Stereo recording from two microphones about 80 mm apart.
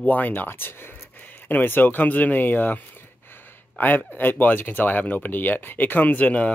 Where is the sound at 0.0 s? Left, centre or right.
Centre.